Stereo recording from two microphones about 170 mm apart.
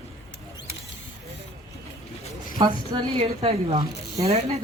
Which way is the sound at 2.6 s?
30° right (ahead or behind).